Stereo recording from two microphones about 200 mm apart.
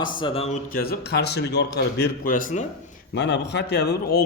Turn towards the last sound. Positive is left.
turn(degrees=55)  # may be behind; listen again after turning